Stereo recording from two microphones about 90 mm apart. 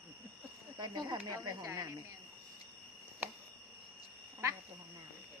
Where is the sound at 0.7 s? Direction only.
50° right (ahead or behind).